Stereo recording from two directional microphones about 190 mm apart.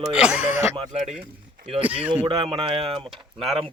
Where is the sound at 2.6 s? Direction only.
25° right (ahead or behind).